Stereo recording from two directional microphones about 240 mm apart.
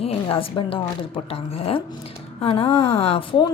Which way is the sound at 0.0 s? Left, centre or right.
Left.